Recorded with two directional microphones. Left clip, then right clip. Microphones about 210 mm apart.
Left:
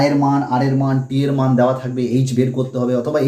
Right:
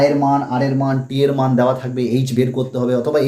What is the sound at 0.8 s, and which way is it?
Speech, 20° right (ahead or behind).